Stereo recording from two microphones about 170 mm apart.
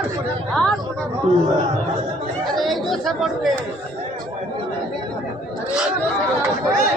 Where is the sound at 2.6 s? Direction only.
Centre (ahead or behind).